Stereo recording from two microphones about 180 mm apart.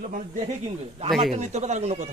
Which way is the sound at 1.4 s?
40° right (ahead or behind).